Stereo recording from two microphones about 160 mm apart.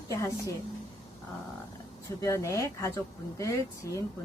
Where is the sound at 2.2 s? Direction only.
20° left (ahead or behind).